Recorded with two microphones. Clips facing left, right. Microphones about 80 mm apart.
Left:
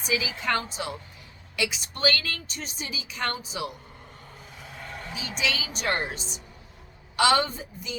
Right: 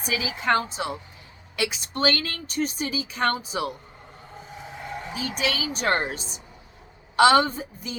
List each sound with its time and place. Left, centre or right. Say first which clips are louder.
0.1 s a woman's voice: right 3 dB; right
4.6 s vehicle: right 4 dB; centre
5.4 s a woman's voice: right 2 dB; right